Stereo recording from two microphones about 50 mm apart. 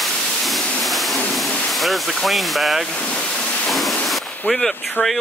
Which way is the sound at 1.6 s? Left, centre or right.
Centre.